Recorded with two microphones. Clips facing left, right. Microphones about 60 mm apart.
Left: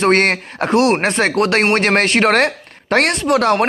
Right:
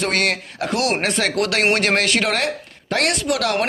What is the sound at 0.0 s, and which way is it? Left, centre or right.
Speech, left.